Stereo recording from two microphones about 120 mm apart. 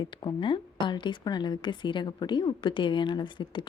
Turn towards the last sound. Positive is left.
turn(degrees=40)  # may be behind; listen again after turning